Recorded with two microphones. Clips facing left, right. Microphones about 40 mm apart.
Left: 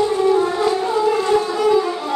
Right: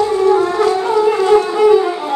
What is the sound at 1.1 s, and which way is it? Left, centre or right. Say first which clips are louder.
Wind instrument: right 7 dB; right.